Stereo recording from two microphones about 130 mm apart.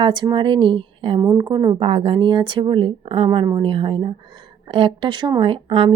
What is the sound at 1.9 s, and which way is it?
Speech, 45° right (ahead or behind).